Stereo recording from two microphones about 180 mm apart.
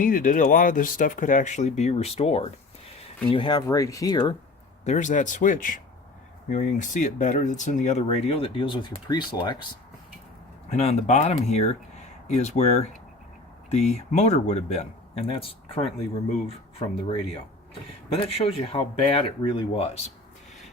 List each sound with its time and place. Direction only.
0.0 s speech: 50° left (ahead or behind); by 4.4 s 20° left (ahead or behind)
4.9 s speech: 40° left (ahead or behind); by 9.6 s 25° left (ahead or behind)
10.7 s speech: 35° left (ahead or behind)
18.5 s speech: 30° left (ahead or behind)